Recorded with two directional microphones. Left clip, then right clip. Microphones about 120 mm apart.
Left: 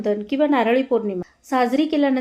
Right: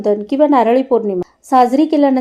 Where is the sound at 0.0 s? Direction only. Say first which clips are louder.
Right 7 dB; 35° right (ahead or behind).